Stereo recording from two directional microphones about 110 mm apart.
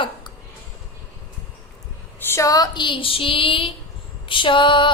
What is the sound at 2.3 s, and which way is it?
A woman's voice, 25° left (ahead or behind).